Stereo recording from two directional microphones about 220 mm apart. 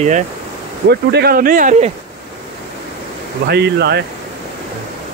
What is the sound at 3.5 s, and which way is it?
Speech, 50° right (ahead or behind).